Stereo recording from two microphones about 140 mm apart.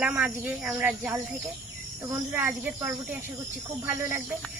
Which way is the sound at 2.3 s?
15° right (ahead or behind).